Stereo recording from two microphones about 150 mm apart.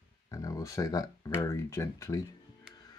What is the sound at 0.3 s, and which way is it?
Speech, 25° left (ahead or behind).